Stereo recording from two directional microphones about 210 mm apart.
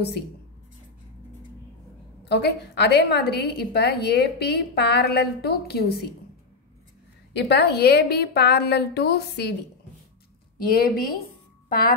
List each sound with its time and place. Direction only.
2.2 s a woman's voice: 50° left (ahead or behind)
7.3 s a woman's voice: 50° left (ahead or behind)
10.7 s a woman's voice: 45° left (ahead or behind)